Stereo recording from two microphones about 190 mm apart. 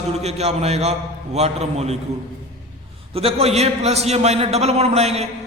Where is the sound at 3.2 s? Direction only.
30° right (ahead or behind).